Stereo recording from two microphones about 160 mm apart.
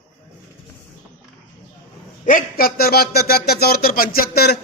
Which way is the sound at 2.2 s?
65° left (ahead or behind).